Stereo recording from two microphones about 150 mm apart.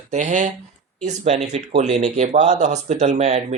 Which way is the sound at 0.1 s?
50° right (ahead or behind).